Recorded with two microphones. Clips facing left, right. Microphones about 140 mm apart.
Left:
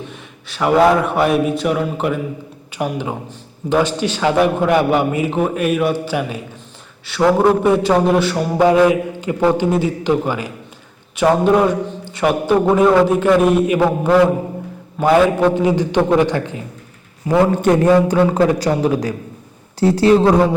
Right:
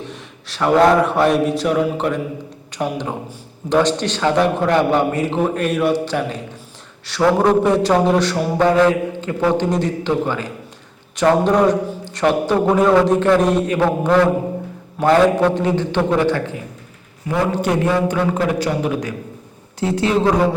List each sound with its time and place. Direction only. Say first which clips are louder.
0.0 s a man's voice: even; centre (ahead or behind); by 16.6 s 20° left (ahead or behind)
17.5 s a man's voice: left 5 dB; 50° left (ahead or behind)
18.1 s speech: left 5 dB; 35° left (ahead or behind)